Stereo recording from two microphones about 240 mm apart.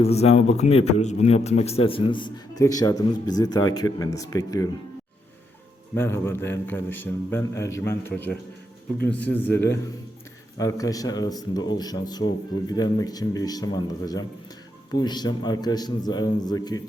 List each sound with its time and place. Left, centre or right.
0.0 s a man's voice: left
5.9 s speech: centre
10.6 s speech: centre